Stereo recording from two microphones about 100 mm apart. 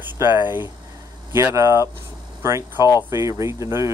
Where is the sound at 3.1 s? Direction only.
30° right (ahead or behind).